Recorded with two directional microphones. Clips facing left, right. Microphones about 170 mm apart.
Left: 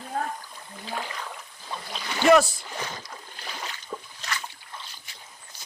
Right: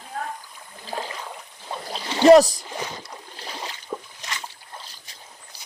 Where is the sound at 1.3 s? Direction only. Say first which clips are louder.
Right 3 dB; 30° right (ahead or behind).